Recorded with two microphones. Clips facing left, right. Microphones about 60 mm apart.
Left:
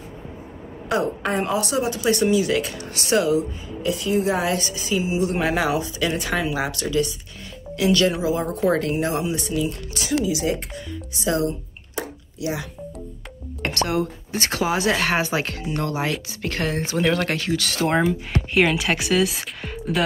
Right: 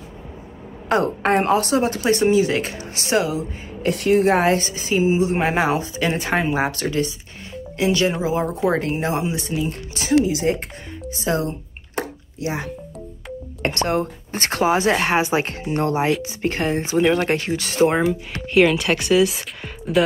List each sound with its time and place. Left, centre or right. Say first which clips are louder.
0.8 s speech: right 4 dB; right
2.0 s speech: right 2 dB; right
3.8 s speech: right 5 dB; right
4.5 s speech: right 4 dB; right
10.7 s telephone dialing: right 1 dB; right
11.9 s a sound: right 3 dB; right
13.6 s music: right 2 dB; right
13.9 s speech: right 1 dB; right; by 17.3 s centre
17.3 s speech: right 2 dB; right
17.9 s speech: even; centre